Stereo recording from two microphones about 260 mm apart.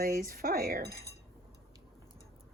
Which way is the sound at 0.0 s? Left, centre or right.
Right.